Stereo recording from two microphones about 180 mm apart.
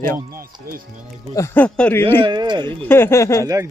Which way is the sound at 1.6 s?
5° left (ahead or behind).